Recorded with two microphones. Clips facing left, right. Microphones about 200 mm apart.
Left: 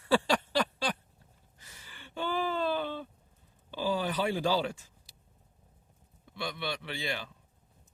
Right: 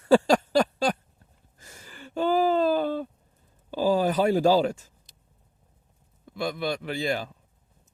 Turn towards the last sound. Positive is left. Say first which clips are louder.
# right 9 dB
turn(degrees=-45)  # may be behind; listen again after turning